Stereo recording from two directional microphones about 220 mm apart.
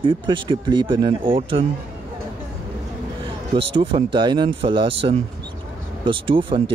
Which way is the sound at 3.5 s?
25° right (ahead or behind).